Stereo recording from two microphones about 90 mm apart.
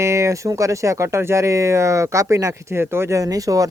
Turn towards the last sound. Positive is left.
turn(degrees=-40)  # may be behind; listen again after turning